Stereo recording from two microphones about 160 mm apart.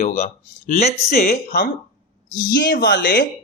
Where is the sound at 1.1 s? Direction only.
70° left (ahead or behind).